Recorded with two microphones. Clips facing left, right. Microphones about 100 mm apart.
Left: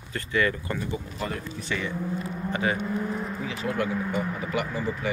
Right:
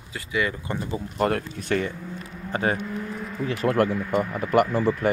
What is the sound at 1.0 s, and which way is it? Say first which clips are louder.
Speech: right 9 dB; 55° right (ahead or behind).